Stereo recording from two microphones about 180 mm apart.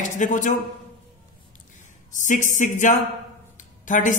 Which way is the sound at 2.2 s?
45° left (ahead or behind).